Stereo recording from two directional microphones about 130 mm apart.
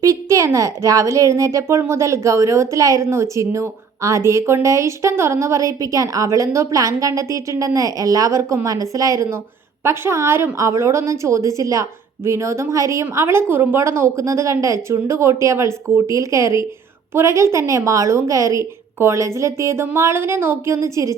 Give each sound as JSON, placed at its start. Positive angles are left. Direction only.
{"t": 0.0, "sound": "a woman's voice", "side_deg": -25}